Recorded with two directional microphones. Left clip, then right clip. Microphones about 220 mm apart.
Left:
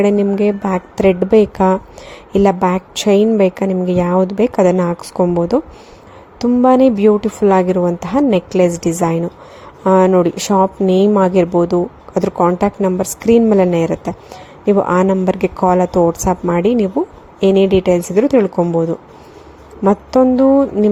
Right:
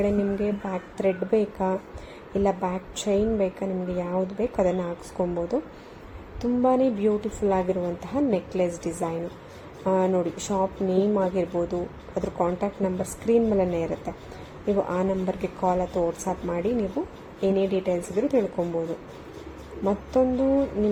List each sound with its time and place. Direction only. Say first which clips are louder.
0.0 s speech: left 12 dB; 40° left (ahead or behind)
19.8 s speech: left 11 dB; 40° left (ahead or behind)